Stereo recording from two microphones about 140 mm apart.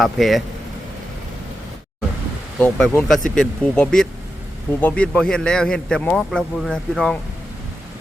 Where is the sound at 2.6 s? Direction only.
10° left (ahead or behind).